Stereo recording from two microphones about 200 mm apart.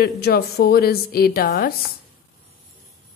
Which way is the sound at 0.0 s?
55° left (ahead or behind).